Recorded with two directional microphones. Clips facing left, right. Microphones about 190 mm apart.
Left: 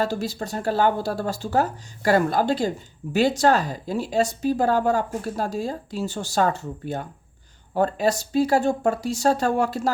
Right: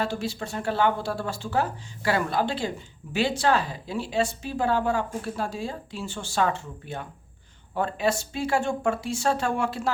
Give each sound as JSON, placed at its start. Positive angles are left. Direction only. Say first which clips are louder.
{"t": 0.0, "sound": "speech", "louder": "left 4 dB", "side_deg": 40}